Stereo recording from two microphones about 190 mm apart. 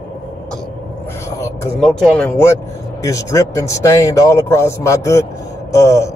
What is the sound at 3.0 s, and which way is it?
Speech, 15° left (ahead or behind).